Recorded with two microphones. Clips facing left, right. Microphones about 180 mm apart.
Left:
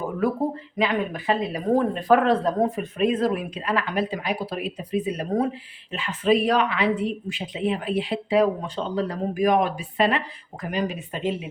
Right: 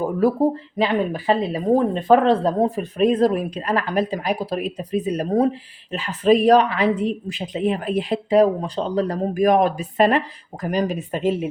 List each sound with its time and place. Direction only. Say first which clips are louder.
0.8 s a woman's voice: right 3 dB; 30° right (ahead or behind)